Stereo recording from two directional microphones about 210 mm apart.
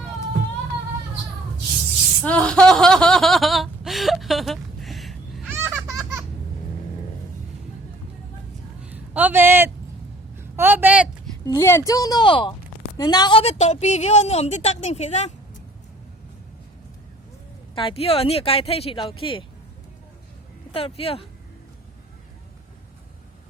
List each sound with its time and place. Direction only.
2.2 s a sound: 5° left (ahead or behind)
5.6 s baby laughter: 10° right (ahead or behind)
8.8 s a sound: 5° right (ahead or behind)
11.4 s a woman's voice: 15° left (ahead or behind); by 15.3 s 30° left (ahead or behind)
17.7 s speech: 25° left (ahead or behind)
20.7 s speech: 25° left (ahead or behind)